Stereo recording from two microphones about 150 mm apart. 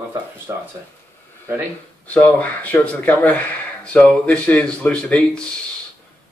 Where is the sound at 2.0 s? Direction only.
10° left (ahead or behind).